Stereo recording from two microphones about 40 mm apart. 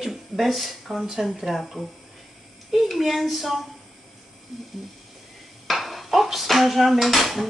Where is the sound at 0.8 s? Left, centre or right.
Centre.